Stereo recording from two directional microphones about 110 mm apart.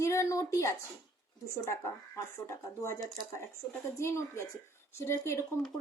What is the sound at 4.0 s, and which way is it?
Speech, 25° left (ahead or behind).